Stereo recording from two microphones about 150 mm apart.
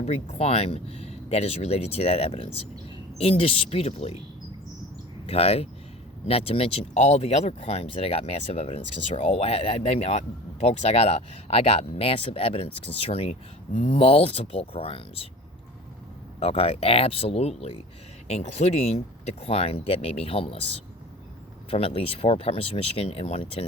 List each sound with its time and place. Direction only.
0.0 s speech: 45° left (ahead or behind)
5.2 s speech: 40° left (ahead or behind)
16.4 s speech: 40° left (ahead or behind)
21.7 s speech: 40° left (ahead or behind)